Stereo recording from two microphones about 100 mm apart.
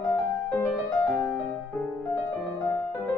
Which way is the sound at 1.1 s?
15° left (ahead or behind).